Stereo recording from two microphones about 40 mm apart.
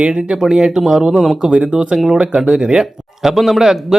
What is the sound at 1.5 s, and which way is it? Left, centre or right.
Speech, right.